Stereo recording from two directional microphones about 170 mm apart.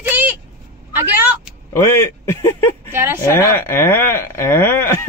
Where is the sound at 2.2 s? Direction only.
15° left (ahead or behind).